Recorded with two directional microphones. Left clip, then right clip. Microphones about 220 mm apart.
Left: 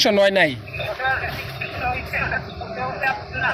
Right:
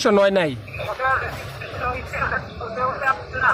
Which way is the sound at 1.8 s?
5° right (ahead or behind).